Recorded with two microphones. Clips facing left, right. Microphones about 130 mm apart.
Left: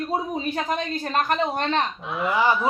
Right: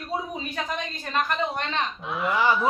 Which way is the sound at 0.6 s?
45° left (ahead or behind).